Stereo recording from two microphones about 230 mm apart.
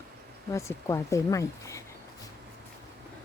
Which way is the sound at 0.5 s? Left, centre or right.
Centre.